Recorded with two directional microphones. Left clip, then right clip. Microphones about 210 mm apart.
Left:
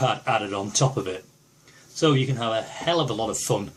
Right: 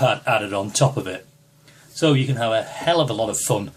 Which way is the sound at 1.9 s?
10° right (ahead or behind).